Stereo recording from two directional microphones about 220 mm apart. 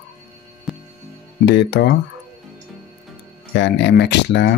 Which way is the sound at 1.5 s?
50° left (ahead or behind).